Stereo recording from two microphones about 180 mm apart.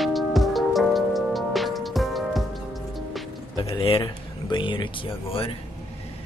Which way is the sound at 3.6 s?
30° left (ahead or behind).